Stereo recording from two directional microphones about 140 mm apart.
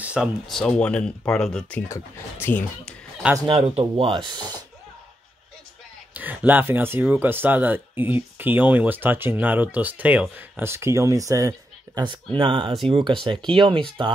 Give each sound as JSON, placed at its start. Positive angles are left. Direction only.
{"t": 0.0, "sound": "speech", "side_deg": -5}
{"t": 3.4, "sound": "speech", "side_deg": -45}
{"t": 6.1, "sound": "speech", "side_deg": -10}